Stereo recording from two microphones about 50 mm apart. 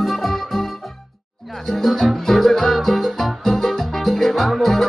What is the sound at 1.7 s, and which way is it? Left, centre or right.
Music, centre.